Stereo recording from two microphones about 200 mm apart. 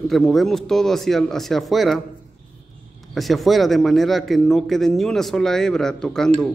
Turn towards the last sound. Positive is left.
turn(degrees=5)  # may be behind; listen again after turning